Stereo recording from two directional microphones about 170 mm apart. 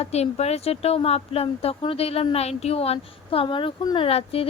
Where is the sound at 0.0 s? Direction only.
40° left (ahead or behind).